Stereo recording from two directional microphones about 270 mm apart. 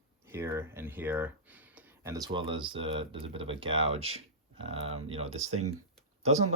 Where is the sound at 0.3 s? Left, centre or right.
Centre.